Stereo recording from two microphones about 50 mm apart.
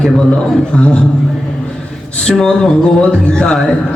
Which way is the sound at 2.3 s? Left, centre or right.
Centre.